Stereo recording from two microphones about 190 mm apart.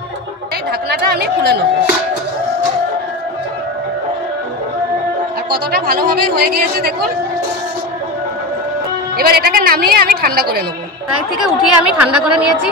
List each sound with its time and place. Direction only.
0.8 s speech: 55° right (ahead or behind)
5.5 s speech: 55° right (ahead or behind)
9.1 s a woman's voice: 55° right (ahead or behind)
11.4 s a woman's voice: 5° right (ahead or behind)